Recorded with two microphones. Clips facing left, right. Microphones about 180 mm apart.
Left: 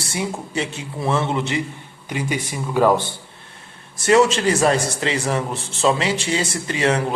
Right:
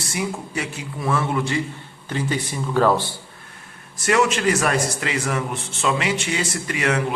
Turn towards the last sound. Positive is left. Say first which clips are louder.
# left 3 dB
turn(degrees=30)  # may be behind; listen again after turning